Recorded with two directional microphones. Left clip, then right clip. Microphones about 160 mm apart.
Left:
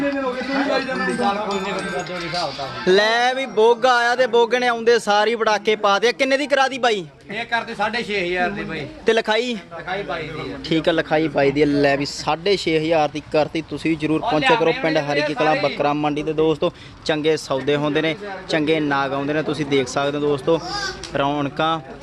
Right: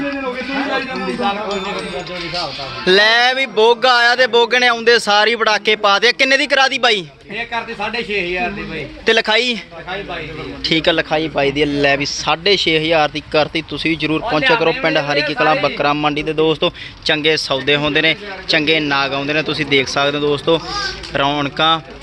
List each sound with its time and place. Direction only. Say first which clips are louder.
2.4 s speech: right 3 dB; 10° left (ahead or behind)
10.6 s speech: right 5 dB; 5° left (ahead or behind)
10.9 s a man's voice: right 2 dB; 25° left (ahead or behind)
11.9 s speech: right 4 dB; 10° left (ahead or behind)